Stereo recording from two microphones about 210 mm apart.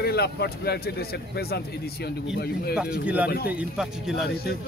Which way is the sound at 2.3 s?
50° left (ahead or behind).